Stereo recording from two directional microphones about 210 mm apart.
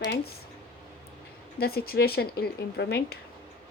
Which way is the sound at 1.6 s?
45° left (ahead or behind).